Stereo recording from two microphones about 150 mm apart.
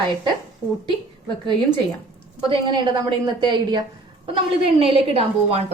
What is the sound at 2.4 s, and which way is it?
A woman's voice, 35° right (ahead or behind).